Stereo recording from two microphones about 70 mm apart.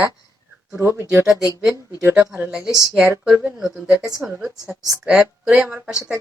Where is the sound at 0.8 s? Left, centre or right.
Right.